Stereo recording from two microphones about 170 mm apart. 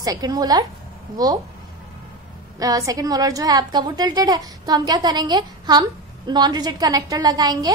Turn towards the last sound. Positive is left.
turn(degrees=-25)  # may be behind; listen again after turning